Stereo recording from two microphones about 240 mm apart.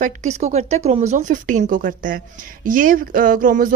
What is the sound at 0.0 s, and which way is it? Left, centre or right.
Speech, right.